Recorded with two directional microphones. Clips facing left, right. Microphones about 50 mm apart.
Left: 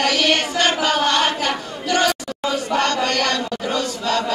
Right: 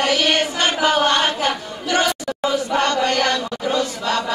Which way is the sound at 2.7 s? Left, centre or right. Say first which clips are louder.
Even; right.